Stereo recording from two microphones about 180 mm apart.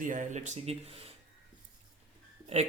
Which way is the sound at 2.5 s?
35° right (ahead or behind).